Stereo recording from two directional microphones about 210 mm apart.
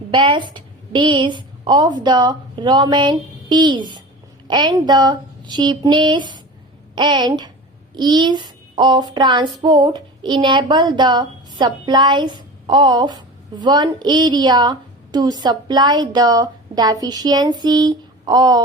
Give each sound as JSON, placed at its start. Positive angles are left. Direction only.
{"t": 0.1, "sound": "a woman's voice", "side_deg": -20}
{"t": 4.4, "sound": "child singing", "side_deg": -20}